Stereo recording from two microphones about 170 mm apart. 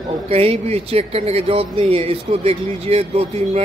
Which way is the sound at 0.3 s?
35° right (ahead or behind).